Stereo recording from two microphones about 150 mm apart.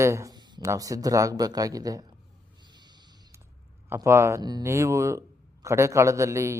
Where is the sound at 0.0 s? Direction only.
20° right (ahead or behind).